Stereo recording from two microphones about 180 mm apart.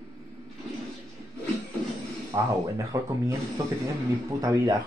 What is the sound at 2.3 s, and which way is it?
Speech, 20° right (ahead or behind).